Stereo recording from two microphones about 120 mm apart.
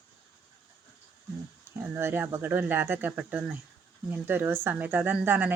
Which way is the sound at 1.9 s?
20° right (ahead or behind).